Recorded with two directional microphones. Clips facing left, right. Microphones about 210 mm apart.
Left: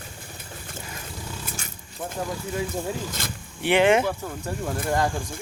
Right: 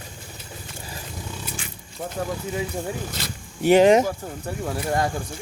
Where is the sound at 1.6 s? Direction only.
45° left (ahead or behind).